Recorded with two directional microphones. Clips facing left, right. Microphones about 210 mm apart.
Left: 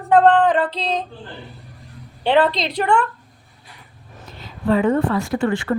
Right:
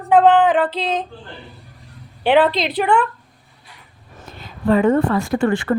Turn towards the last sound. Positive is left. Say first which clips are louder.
# right 2 dB
turn(degrees=-50)  # may be behind; listen again after turning